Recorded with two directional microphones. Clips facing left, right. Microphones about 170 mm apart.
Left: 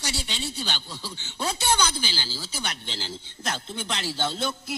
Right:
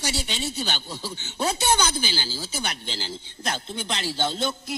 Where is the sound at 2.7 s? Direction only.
5° right (ahead or behind).